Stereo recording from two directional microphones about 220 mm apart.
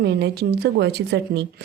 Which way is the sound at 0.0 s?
50° right (ahead or behind).